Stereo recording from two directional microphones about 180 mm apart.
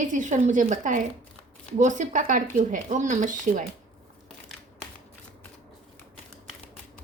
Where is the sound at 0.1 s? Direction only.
45° right (ahead or behind).